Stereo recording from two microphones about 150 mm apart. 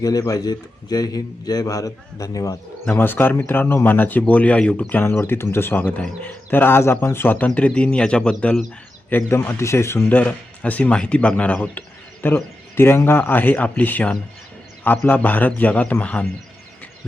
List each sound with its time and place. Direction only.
0.0 s a man's voice: 25° left (ahead or behind)